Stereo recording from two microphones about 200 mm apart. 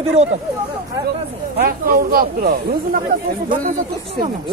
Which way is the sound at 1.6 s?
50° right (ahead or behind).